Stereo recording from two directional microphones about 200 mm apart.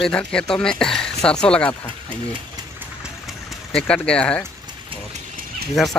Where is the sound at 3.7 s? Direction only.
5° left (ahead or behind).